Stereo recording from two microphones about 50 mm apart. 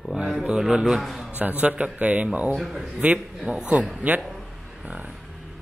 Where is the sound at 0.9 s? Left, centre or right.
Centre.